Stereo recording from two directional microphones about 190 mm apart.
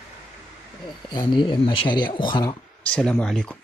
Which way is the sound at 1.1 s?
25° left (ahead or behind).